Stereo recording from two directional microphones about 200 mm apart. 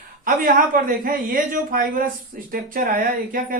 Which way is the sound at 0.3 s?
45° right (ahead or behind).